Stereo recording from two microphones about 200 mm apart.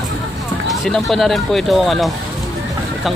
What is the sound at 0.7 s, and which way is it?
Speech, centre (ahead or behind).